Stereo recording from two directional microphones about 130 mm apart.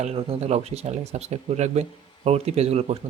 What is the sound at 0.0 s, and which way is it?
Speech, 50° right (ahead or behind).